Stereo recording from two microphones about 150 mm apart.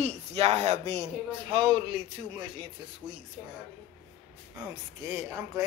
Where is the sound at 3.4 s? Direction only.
5° left (ahead or behind).